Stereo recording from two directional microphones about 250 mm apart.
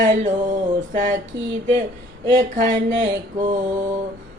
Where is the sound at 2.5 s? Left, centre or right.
Right.